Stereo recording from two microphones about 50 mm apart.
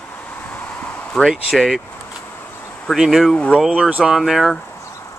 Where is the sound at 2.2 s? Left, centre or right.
Left.